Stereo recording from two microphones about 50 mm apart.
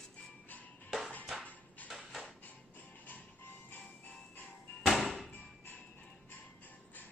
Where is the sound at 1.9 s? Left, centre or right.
Centre.